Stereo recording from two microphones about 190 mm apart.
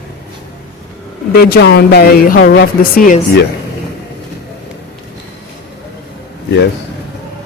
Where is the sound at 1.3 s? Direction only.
55° left (ahead or behind).